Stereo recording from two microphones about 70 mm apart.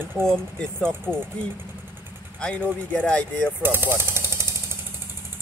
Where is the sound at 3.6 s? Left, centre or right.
Right.